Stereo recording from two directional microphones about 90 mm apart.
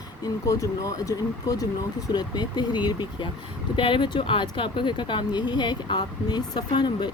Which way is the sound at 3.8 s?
70° left (ahead or behind).